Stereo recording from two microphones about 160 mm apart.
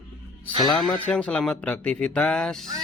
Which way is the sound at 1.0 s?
10° left (ahead or behind).